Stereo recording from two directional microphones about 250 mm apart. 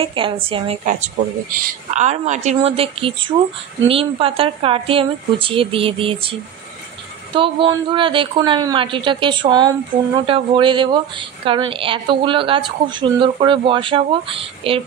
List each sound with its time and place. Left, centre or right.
0.0 s a woman's voice: centre
7.3 s a woman's voice: right